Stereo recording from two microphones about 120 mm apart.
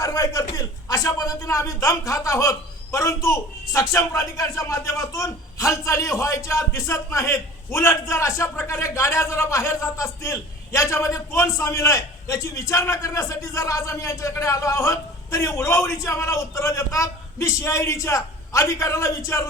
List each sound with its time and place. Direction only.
0.0 s a man's voice: 30° left (ahead or behind)